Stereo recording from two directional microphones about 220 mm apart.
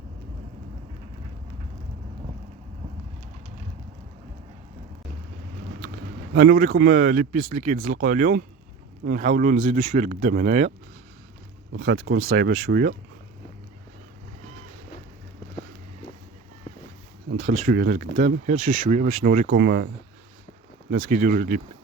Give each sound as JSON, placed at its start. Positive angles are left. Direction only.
{"t": 6.3, "sound": "speech", "side_deg": -40}
{"t": 11.9, "sound": "speech", "side_deg": -70}
{"t": 12.3, "sound": "speech", "side_deg": -55}
{"t": 17.3, "sound": "speech", "side_deg": -35}
{"t": 20.9, "sound": "speech", "side_deg": -40}